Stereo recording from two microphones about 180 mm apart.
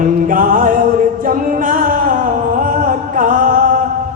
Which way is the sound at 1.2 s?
50° right (ahead or behind).